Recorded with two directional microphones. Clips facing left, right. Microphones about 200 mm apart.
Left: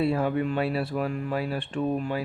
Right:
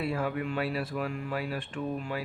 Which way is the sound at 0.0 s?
30° left (ahead or behind).